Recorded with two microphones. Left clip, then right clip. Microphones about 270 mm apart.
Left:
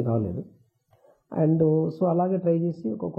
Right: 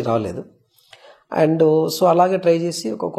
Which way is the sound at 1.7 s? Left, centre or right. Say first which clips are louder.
Right 9 dB; right.